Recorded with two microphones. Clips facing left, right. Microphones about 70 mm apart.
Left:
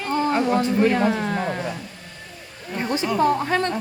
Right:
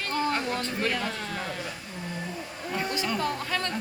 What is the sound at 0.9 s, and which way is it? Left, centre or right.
Speech, left.